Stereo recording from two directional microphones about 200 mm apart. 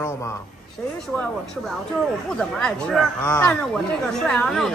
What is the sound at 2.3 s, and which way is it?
A woman's voice, 5° left (ahead or behind).